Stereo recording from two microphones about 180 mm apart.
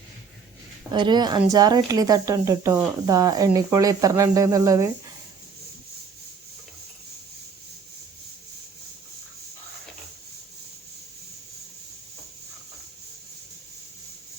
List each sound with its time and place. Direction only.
0.9 s a woman's voice: 25° right (ahead or behind)